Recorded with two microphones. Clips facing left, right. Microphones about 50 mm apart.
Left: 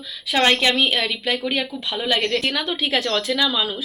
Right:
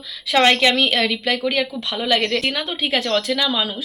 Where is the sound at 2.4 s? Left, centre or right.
Right.